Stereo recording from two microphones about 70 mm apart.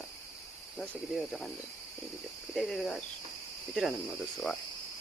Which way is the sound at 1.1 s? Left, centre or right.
Centre.